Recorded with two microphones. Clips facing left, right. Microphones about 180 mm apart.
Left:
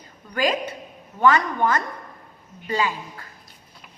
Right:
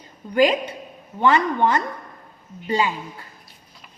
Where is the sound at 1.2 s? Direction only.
25° right (ahead or behind).